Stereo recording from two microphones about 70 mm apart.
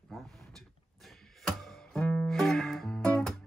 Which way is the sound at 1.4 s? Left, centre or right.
Centre.